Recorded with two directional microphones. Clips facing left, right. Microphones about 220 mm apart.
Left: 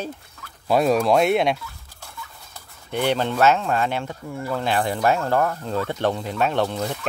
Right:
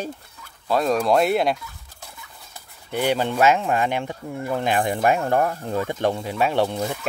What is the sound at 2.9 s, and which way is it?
Speech, 10° right (ahead or behind).